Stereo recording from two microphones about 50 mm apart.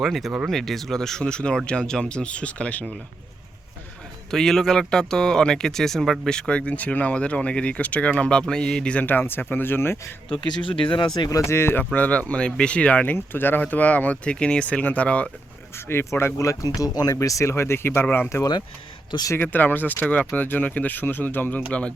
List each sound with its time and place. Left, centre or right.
0.0 s speech: centre; by 3.0 s left
4.3 s speech: centre
6.2 s speech: centre
9.0 s speech: left
11.3 s speech: left
11.9 s speech: left
13.1 s speech: left
15.7 s speech: left
16.0 s speech: left
17.5 s speech: left
19.4 s speech: left
21.7 s speech: left